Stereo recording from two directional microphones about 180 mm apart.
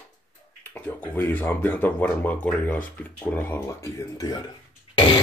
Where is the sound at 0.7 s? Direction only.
10° left (ahead or behind).